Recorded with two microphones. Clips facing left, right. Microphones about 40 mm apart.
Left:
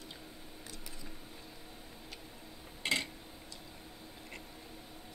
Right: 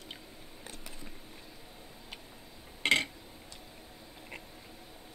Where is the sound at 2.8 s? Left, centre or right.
Right.